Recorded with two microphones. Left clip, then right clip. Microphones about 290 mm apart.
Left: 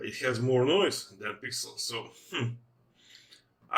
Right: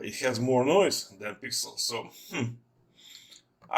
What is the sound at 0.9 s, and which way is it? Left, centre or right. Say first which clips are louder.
Speech: right 2 dB; right.